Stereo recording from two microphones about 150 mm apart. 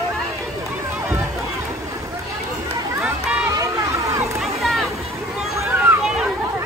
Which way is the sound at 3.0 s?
5° right (ahead or behind).